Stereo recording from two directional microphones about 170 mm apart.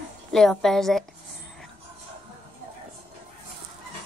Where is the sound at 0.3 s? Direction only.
5° left (ahead or behind).